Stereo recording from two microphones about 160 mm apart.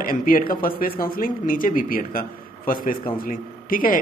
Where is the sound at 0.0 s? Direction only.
60° left (ahead or behind).